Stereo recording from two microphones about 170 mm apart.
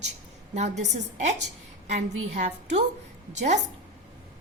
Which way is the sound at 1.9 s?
40° right (ahead or behind).